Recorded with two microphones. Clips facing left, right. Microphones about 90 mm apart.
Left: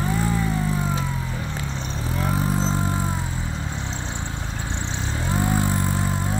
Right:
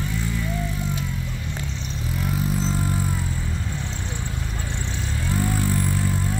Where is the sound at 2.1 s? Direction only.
35° left (ahead or behind).